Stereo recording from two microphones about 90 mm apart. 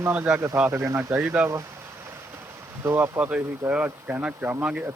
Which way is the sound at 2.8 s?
30° right (ahead or behind).